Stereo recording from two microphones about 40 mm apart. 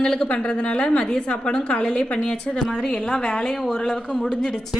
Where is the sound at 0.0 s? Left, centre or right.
Left.